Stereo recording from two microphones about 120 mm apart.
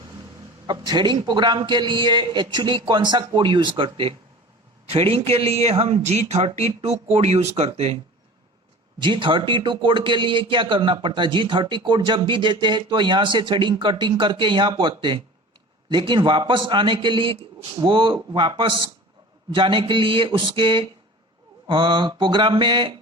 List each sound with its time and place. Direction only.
0.7 s a man's voice: 35° right (ahead or behind); by 7.9 s 60° right (ahead or behind)
9.0 s a man's voice: 45° right (ahead or behind)